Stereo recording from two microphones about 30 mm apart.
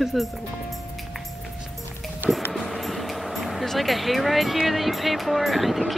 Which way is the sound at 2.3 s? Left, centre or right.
Centre.